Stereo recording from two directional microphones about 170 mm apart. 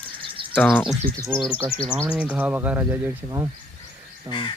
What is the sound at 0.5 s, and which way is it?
Speech, 10° left (ahead or behind).